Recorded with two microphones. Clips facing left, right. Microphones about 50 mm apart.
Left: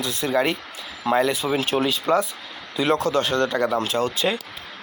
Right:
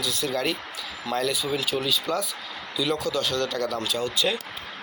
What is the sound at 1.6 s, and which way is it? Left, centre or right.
Speech, left.